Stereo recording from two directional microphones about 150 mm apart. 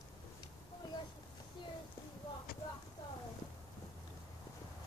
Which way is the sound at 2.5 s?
80° left.